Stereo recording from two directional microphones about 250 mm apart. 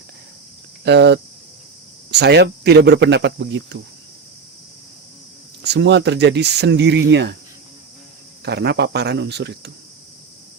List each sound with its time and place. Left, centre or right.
0.9 s speech: right
5.6 s speech: right
8.4 s speech: right